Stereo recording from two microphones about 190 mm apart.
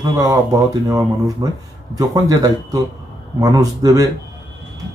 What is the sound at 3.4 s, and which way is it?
Speech, 20° right (ahead or behind).